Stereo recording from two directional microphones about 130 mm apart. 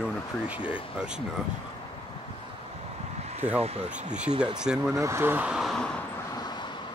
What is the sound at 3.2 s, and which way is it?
Vehicle, 55° right (ahead or behind).